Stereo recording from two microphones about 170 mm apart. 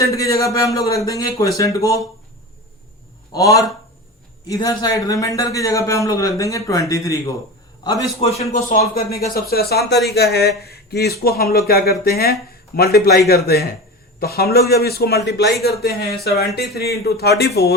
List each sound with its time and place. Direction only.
0.0 s a man's voice: 20° left (ahead or behind)
3.3 s a man's voice: 20° left (ahead or behind)
8.2 s speech: 35° left (ahead or behind)
9.0 s speech: 65° left (ahead or behind); by 15.5 s 80° left
15.6 s speech: 70° left (ahead or behind)